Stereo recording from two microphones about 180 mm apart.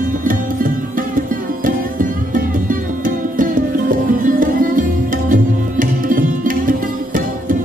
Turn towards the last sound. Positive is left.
turn(degrees=-50)  # may be behind; listen again after turning